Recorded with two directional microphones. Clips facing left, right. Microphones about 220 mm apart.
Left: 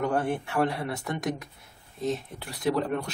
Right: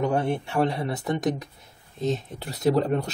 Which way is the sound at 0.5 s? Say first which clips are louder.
Right 2 dB; 25° right (ahead or behind).